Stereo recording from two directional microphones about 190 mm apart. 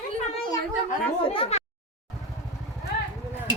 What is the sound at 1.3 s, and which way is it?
Speech, 30° left (ahead or behind).